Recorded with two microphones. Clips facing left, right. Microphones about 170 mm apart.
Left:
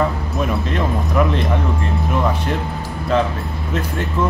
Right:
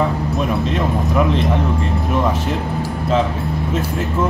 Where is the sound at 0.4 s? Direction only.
Centre (ahead or behind).